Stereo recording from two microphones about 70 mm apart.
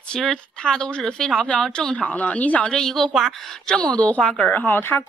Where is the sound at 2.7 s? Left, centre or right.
Centre; by 5.1 s left.